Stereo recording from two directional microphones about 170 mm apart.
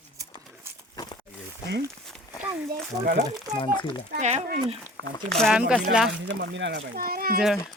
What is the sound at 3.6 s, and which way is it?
Speech, 30° left (ahead or behind).